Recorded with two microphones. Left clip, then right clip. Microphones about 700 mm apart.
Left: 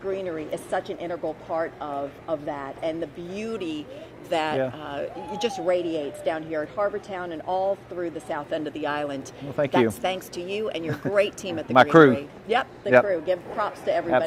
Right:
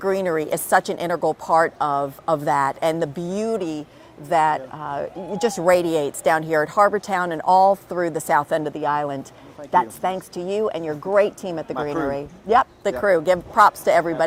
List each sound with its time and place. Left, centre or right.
0.0 s a woman's voice: right
11.7 s speech: left
12.1 s speech: right